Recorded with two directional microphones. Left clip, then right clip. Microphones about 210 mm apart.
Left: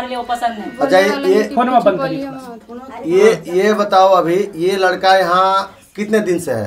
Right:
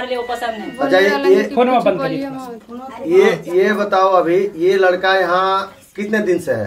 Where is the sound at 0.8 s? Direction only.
35° left (ahead or behind).